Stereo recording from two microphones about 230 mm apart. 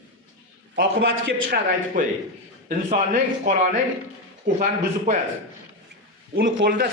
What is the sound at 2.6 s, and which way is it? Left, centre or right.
A man's voice, right.